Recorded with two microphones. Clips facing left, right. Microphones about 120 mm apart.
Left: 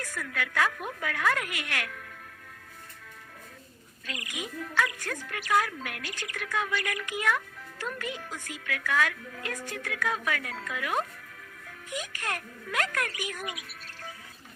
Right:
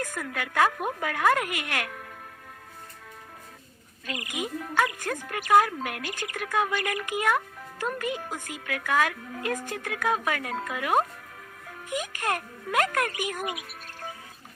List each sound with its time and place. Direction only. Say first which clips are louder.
0.0 s a sound: right 4 dB; 45° right (ahead or behind)
0.3 s speech: right 4 dB; 45° right (ahead or behind)
4.0 s speech: right 5 dB; 50° right (ahead or behind)